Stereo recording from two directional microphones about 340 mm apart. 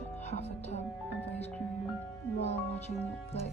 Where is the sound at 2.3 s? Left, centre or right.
Centre.